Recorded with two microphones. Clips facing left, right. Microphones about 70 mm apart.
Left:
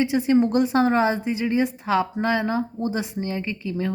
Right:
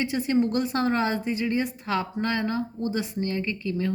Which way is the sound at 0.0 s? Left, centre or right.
Centre.